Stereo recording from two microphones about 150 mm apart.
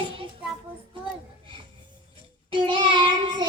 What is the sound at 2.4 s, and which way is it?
Child singing, 30° right (ahead or behind).